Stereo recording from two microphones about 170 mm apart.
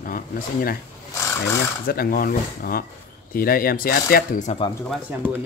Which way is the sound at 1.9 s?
60° left (ahead or behind).